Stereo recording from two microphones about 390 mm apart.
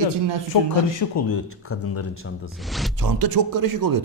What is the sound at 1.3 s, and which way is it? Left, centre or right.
Speech, left.